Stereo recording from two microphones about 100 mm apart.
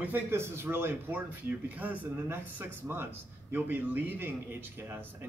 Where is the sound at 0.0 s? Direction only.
20° right (ahead or behind).